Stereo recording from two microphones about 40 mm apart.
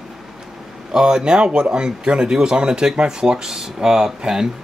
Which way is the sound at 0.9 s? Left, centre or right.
Centre.